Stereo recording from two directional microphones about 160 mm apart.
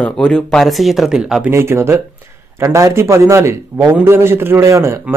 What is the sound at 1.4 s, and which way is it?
A man's voice, 15° right (ahead or behind).